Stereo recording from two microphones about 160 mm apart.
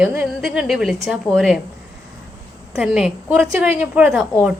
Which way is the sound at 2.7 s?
5° right (ahead or behind).